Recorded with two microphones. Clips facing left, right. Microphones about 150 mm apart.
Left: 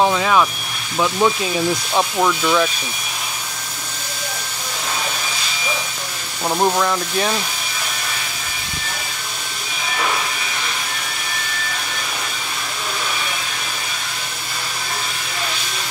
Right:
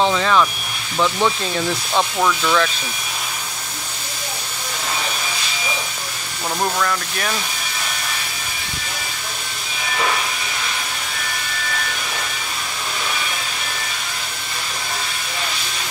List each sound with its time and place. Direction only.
0.0 s speech: 10° left (ahead or behind)
6.6 s speech: 20° left (ahead or behind)